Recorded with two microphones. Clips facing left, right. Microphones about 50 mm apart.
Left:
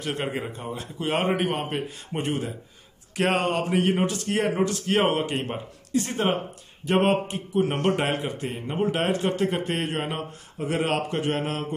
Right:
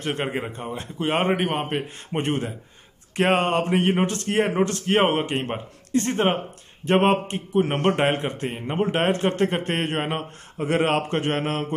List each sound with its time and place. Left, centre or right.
0.2 s a man's voice: right
3.2 s a man's voice: right
5.9 s speech: right
6.9 s a man's voice: right